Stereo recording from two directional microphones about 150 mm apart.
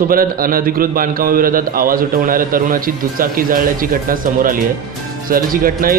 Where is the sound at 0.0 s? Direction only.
75° right (ahead or behind).